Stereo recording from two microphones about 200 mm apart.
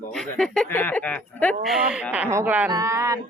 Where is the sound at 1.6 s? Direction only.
5° right (ahead or behind).